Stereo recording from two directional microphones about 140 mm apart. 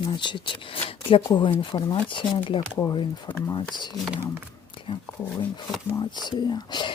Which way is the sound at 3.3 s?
10° left (ahead or behind).